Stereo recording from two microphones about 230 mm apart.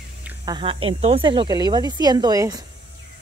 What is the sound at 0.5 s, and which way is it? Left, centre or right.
Speech, right.